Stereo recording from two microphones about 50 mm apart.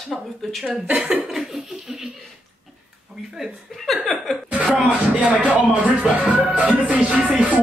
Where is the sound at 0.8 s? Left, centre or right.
Centre.